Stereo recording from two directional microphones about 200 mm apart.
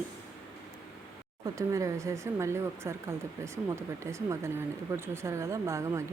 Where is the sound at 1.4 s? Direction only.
15° right (ahead or behind).